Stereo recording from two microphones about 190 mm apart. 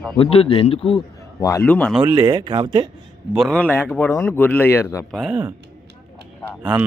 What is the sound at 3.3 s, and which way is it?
A man's voice, 5° left (ahead or behind).